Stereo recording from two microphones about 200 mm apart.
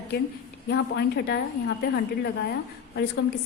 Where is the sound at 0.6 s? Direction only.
60° left (ahead or behind).